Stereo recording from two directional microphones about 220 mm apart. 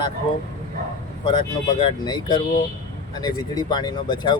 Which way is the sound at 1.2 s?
20° left (ahead or behind).